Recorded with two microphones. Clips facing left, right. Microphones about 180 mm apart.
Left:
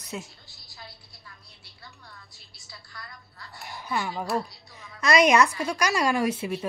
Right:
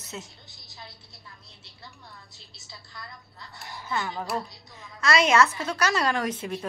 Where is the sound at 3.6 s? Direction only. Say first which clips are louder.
Left 1 dB; 20° left (ahead or behind).